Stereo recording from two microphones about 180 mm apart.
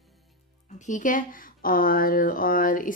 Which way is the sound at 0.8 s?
45° left (ahead or behind).